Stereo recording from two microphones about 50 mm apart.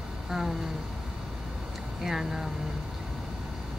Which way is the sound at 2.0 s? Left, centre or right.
Centre.